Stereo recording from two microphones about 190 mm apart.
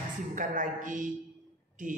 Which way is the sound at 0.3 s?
45° right (ahead or behind).